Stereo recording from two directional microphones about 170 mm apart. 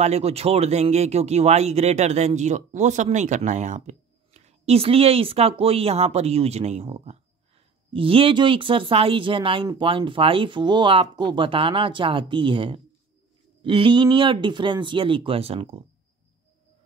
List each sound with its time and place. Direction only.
0.0 s speech: 40° right (ahead or behind)